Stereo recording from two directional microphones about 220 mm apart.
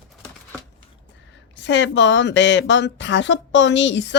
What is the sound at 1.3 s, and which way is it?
Speech, 55° left (ahead or behind).